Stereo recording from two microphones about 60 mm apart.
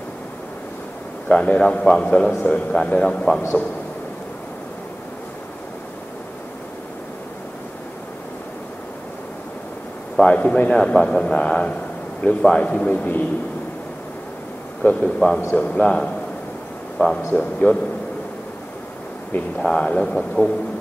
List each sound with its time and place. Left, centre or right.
1.3 s a man's voice: centre
10.2 s a man's voice: centre
14.8 s a man's voice: left
15.1 s a man's voice: centre
17.0 s a man's voice: left
17.4 s a man's voice: centre
19.6 s a man's voice: centre